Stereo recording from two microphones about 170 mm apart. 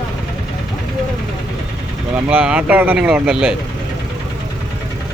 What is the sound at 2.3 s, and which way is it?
Speech, 5° right (ahead or behind).